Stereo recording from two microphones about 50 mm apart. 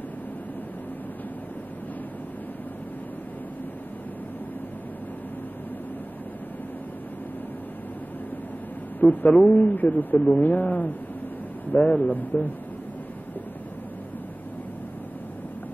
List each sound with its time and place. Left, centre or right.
9.1 s speech: left